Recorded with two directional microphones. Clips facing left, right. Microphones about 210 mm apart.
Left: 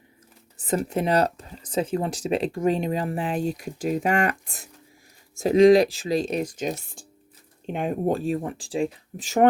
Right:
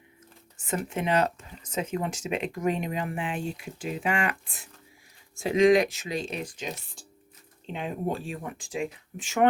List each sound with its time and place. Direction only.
0.5 s speech: 35° left (ahead or behind)